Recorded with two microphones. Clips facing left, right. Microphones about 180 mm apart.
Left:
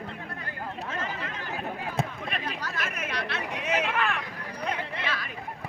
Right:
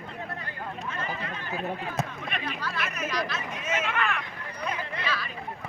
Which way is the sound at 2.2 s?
35° left (ahead or behind).